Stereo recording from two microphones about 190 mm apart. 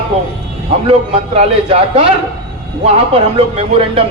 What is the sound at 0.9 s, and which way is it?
A man's voice, 30° right (ahead or behind).